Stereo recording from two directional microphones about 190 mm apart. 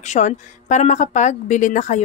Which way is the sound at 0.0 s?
40° left (ahead or behind).